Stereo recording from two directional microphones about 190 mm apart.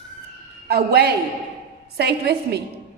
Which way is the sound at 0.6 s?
55° right (ahead or behind).